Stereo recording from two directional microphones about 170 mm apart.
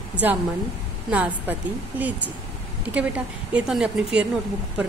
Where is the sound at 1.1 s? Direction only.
10° right (ahead or behind).